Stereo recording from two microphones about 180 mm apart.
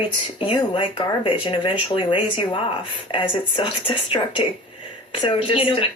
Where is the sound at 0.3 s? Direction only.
30° left (ahead or behind).